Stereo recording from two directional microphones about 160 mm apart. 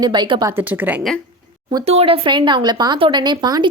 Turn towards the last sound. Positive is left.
turn(degrees=-30)  # may be behind; listen again after turning